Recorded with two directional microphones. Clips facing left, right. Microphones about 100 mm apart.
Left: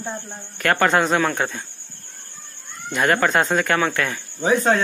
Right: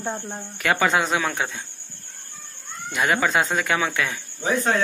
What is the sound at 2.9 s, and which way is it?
Speech, 5° right (ahead or behind).